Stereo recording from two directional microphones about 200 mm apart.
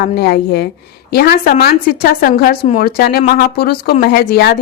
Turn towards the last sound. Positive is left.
turn(degrees=50)  # may be behind; listen again after turning